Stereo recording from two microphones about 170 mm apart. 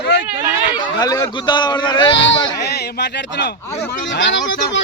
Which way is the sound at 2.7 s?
75° left (ahead or behind).